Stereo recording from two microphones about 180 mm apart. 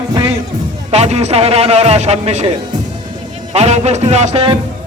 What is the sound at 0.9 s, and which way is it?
A man's voice, 35° right (ahead or behind).